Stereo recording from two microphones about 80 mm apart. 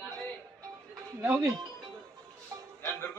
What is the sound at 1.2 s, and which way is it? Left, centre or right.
Speech, right.